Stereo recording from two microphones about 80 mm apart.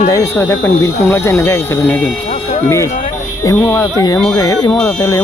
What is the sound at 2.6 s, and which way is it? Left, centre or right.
Speech, left.